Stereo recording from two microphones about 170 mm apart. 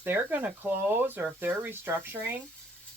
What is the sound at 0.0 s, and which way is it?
Speech, 10° right (ahead or behind).